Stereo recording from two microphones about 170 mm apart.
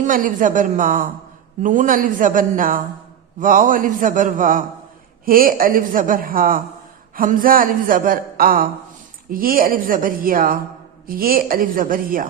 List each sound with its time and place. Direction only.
0.0 s a man's voice: 50° right (ahead or behind)